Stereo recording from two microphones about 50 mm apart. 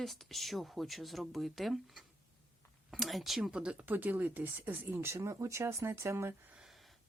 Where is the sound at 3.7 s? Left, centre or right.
Right.